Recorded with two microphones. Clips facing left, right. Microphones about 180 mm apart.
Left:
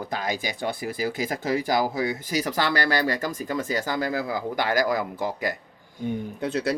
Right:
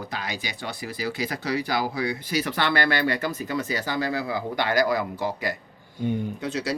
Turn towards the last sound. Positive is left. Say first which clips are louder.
# left 2 dB
turn(degrees=55)  # may be behind; listen again after turning